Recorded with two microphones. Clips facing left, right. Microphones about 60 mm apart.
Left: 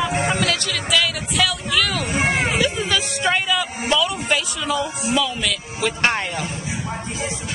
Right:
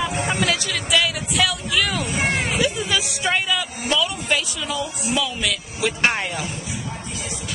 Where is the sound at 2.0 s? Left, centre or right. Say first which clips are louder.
Left 2 dB; left.